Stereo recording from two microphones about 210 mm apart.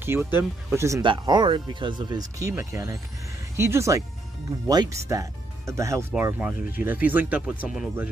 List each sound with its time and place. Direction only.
0.0 s speech: 10° right (ahead or behind)